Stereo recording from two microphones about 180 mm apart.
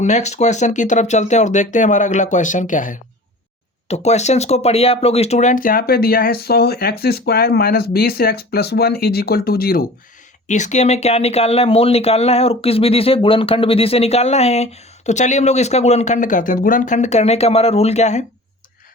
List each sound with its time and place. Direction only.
0.0 s speech: 40° left (ahead or behind); by 9.8 s 55° left (ahead or behind)
10.5 s speech: 40° left (ahead or behind)